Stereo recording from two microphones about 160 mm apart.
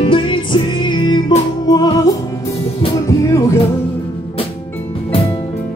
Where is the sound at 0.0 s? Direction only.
30° left (ahead or behind).